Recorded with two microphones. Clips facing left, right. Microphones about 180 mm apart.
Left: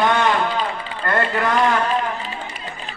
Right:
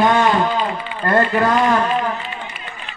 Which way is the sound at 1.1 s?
35° right (ahead or behind).